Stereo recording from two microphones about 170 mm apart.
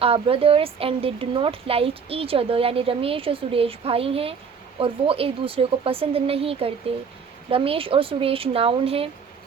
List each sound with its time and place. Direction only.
0.0 s a woman's voice: 35° right (ahead or behind)